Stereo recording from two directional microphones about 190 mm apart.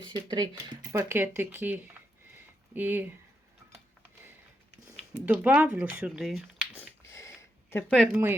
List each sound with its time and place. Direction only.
0.1 s speech: 25° right (ahead or behind)
5.2 s speech: 10° right (ahead or behind)
6.7 s a sound: 15° left (ahead or behind)
8.0 s speech: 10° right (ahead or behind)